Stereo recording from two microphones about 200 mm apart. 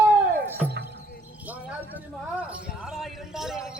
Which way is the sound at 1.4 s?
5° right (ahead or behind).